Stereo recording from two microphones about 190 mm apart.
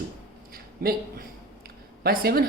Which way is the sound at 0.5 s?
50° right (ahead or behind).